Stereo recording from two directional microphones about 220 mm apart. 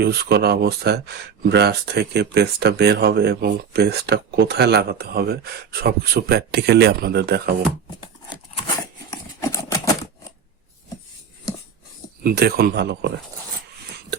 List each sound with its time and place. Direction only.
0.0 s speech: 45° right (ahead or behind)
8.0 s a sound: 20° left (ahead or behind)
12.2 s speech: 45° right (ahead or behind)